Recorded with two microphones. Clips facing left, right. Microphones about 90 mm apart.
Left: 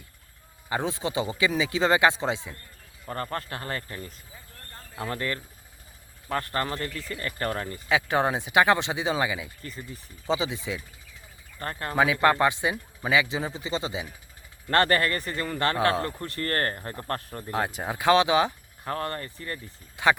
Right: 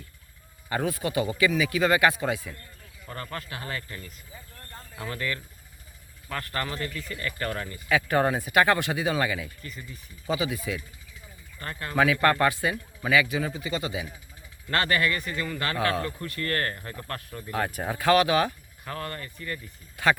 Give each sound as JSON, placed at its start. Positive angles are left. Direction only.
{"t": 0.7, "sound": "a man's voice", "side_deg": 25}
{"t": 3.1, "sound": "speech", "side_deg": 35}
{"t": 7.9, "sound": "a man's voice", "side_deg": 20}
{"t": 9.6, "sound": "a man's voice", "side_deg": 35}
{"t": 11.6, "sound": "speech", "side_deg": 35}
{"t": 11.9, "sound": "a man's voice", "side_deg": 20}
{"t": 14.7, "sound": "speech", "side_deg": 40}
{"t": 17.6, "sound": "a man's voice", "side_deg": 20}
{"t": 18.9, "sound": "speech", "side_deg": 35}
{"t": 20.0, "sound": "a man's voice", "side_deg": 20}